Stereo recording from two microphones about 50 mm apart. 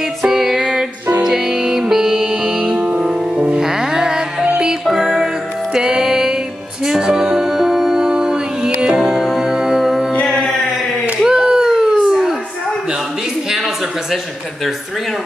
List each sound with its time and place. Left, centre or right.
0.2 s music: centre
2.7 s music: right
3.6 s music: centre
11.2 s a sound: centre